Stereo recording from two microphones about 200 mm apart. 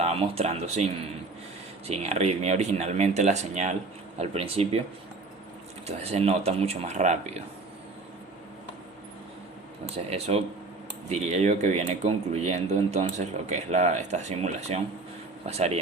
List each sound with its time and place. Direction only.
0.0 s speech: 30° right (ahead or behind)
1.9 s speech: 35° right (ahead or behind)
6.0 s speech: 30° right (ahead or behind)
10.0 s speech: 30° right (ahead or behind)